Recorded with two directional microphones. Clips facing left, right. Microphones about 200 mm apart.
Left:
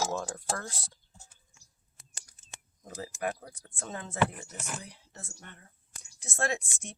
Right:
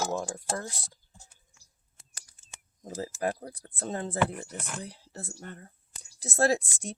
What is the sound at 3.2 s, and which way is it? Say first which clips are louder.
Speech: right 2 dB; 35° right (ahead or behind).